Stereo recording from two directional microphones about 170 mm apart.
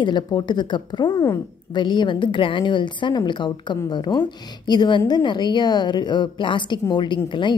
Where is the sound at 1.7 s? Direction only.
25° left (ahead or behind).